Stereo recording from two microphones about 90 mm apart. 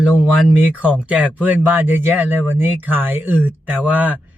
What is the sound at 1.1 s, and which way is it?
A man's voice, 15° right (ahead or behind).